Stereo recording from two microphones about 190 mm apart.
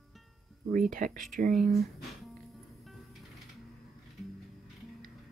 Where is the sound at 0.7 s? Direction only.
45° right (ahead or behind).